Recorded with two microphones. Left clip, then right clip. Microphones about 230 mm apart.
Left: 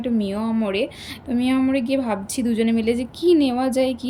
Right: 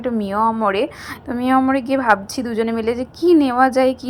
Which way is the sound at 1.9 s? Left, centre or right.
Right.